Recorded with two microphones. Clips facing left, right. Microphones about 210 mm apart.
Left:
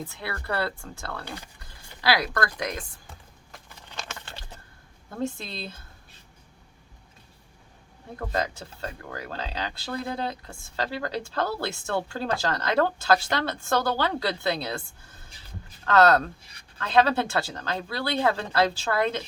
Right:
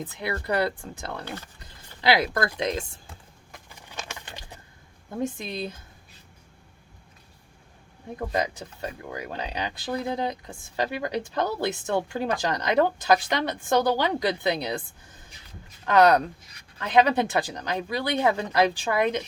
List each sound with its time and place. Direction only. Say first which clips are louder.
0.0 s speech: right 4 dB; 20° right (ahead or behind)
3.7 s a sound: right 1 dB; 10° right (ahead or behind)
5.1 s speech: right 2 dB; 15° right (ahead or behind)
8.1 s speech: right 2 dB; 15° right (ahead or behind)
16.4 s speech: right 1 dB; 30° left (ahead or behind)
16.7 s speech: right 1 dB; 15° right (ahead or behind)